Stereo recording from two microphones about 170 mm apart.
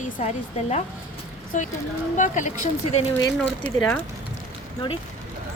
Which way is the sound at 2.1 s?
45° left (ahead or behind).